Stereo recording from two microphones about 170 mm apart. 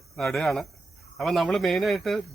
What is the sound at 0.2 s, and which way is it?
Speech, centre (ahead or behind).